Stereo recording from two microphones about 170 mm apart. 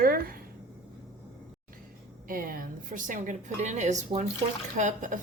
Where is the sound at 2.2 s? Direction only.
55° right (ahead or behind).